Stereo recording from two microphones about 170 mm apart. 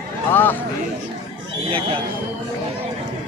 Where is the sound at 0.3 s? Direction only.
10° left (ahead or behind).